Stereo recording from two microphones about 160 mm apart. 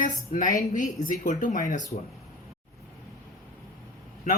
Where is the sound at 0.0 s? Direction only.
55° left (ahead or behind).